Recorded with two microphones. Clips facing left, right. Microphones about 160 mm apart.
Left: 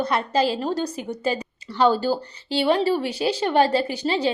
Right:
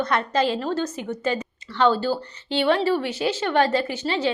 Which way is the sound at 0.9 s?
35° left (ahead or behind).